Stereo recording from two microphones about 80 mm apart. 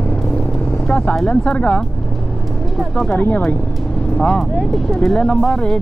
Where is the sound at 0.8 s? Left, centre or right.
Centre.